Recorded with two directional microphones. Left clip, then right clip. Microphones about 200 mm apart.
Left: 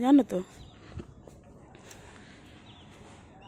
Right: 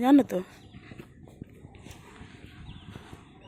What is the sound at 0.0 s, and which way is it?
Speech, 15° left (ahead or behind).